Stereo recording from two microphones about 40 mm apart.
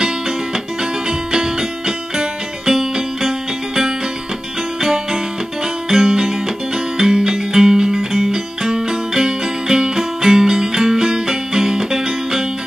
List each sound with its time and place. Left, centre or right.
1.3 s music: centre